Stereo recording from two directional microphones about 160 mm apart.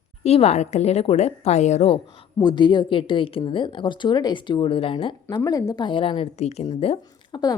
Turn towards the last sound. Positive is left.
turn(degrees=25)  # may be behind; listen again after turning